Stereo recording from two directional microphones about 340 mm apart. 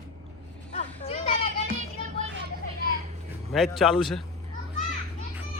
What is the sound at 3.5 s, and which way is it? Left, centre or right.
Speech, centre.